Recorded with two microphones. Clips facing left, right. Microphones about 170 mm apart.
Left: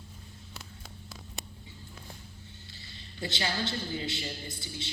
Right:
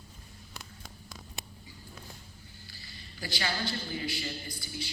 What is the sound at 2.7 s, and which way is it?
A man's voice, 25° left (ahead or behind).